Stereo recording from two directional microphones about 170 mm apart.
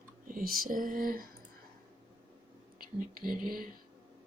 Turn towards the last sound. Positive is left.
turn(degrees=-55)  # may be behind; listen again after turning